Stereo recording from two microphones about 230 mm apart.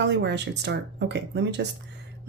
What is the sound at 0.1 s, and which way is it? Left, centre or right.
Speech, right.